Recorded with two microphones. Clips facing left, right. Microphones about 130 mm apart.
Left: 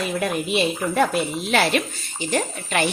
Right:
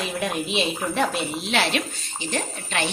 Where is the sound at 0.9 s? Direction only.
50° left (ahead or behind).